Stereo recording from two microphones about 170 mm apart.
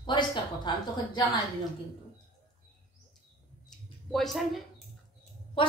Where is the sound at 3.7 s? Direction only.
Centre (ahead or behind).